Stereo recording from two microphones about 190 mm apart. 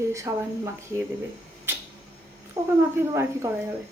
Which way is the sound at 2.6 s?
15° right (ahead or behind).